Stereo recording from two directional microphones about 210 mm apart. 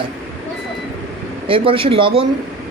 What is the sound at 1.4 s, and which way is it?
Speech, 25° right (ahead or behind).